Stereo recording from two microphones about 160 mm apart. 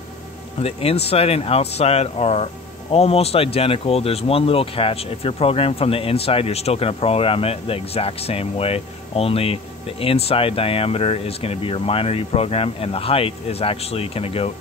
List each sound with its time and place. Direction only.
0.6 s speech: 40° left (ahead or behind)